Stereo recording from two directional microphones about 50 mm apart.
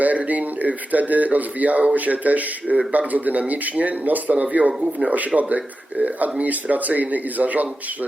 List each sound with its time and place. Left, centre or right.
0.0 s speech: right